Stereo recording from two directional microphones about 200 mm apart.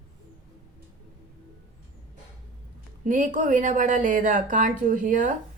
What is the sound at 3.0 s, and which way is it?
Speech, 40° right (ahead or behind).